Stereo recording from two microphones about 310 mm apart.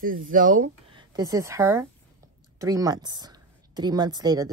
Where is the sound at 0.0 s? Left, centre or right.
Right.